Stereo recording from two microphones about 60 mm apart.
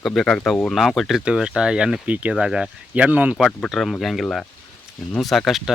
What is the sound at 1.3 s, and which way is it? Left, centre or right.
Speech, centre.